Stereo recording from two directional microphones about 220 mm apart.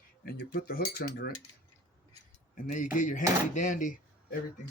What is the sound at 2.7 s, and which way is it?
Speech, 35° left (ahead or behind).